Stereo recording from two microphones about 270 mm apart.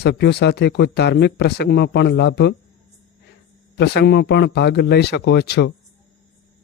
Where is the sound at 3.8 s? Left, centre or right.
Left.